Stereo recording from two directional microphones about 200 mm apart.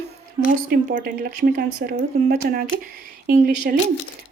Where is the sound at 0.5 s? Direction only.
45° right (ahead or behind).